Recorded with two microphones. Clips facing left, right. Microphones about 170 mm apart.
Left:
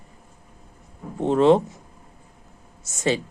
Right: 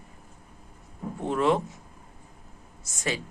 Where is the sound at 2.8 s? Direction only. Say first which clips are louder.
Left 8 dB; 25° left (ahead or behind).